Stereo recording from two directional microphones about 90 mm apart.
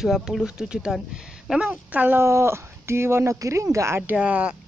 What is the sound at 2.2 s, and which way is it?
Speech, 30° right (ahead or behind).